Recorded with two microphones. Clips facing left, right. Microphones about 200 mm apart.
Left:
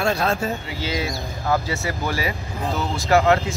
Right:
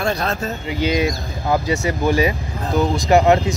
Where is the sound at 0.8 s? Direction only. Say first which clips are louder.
Right 8 dB; 15° right (ahead or behind).